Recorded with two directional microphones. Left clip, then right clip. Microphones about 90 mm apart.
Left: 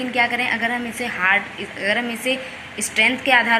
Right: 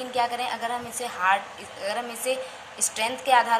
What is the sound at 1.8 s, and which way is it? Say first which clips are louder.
A woman's voice: left 8 dB; 5° right (ahead or behind).